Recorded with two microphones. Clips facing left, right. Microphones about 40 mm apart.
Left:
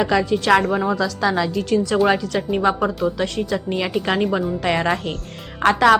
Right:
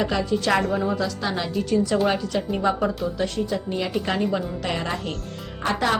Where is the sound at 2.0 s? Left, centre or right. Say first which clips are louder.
Left 4 dB; left.